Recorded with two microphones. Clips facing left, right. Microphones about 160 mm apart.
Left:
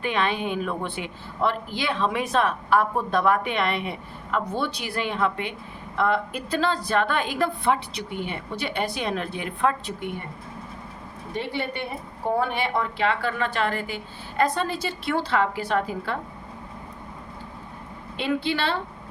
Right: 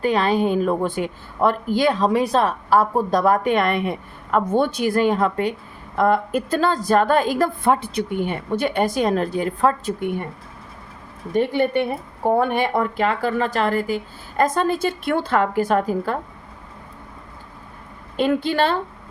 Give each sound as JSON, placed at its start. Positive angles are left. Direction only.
{"t": 0.0, "sound": "a woman's voice", "side_deg": -35}
{"t": 11.3, "sound": "speech", "side_deg": -50}
{"t": 18.2, "sound": "speech", "side_deg": -45}